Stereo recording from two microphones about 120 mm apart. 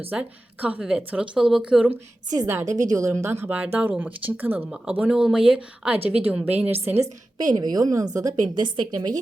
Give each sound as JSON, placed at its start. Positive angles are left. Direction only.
{"t": 0.1, "sound": "a woman's voice", "side_deg": -10}
{"t": 2.5, "sound": "a woman's voice", "side_deg": -20}
{"t": 7.3, "sound": "a woman's voice", "side_deg": -35}